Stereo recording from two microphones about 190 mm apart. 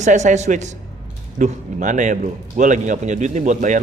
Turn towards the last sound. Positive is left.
turn(degrees=-40)  # may be behind; listen again after turning